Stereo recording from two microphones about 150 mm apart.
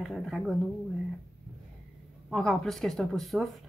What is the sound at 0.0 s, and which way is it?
Speech, centre (ahead or behind).